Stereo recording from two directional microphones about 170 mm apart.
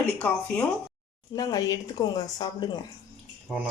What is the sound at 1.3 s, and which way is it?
Speech, 20° left (ahead or behind).